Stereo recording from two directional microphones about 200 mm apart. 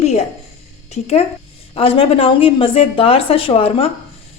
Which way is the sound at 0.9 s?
30° left (ahead or behind).